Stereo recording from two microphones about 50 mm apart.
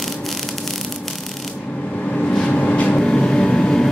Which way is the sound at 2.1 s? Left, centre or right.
Centre.